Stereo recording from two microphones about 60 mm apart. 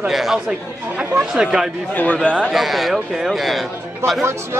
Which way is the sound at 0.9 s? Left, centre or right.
Centre.